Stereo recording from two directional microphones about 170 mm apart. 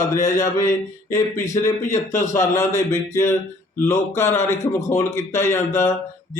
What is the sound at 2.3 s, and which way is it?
A man's voice, 15° left (ahead or behind).